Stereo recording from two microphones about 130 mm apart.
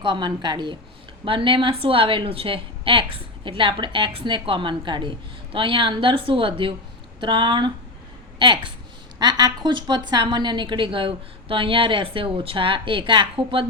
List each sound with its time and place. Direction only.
0.0 s a woman's voice: 35° right (ahead or behind)